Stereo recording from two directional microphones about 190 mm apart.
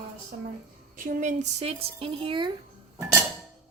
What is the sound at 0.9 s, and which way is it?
Speech, 45° right (ahead or behind).